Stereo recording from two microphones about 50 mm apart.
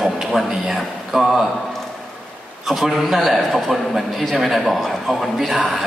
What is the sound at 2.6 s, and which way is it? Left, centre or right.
A man's voice, centre.